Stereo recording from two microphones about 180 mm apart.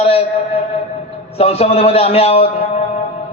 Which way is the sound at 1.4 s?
35° left (ahead or behind).